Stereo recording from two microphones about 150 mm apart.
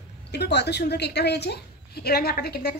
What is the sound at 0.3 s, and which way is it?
A woman's voice, 90° left.